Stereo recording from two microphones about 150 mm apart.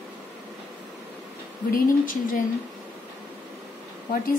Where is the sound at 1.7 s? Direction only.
65° left (ahead or behind).